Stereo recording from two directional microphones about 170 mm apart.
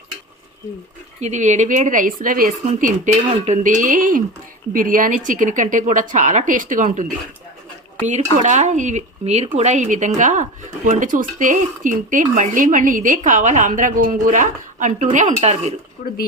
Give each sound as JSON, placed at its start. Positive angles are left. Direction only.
{"t": 1.2, "sound": "speech", "side_deg": -45}
{"t": 16.0, "sound": "speech", "side_deg": 55}